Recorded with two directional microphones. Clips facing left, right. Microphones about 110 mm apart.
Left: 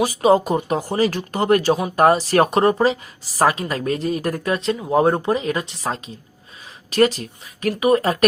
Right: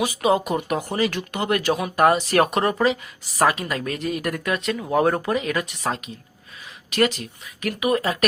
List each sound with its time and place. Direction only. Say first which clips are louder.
0.0 s speech: left 5 dB; 35° left (ahead or behind)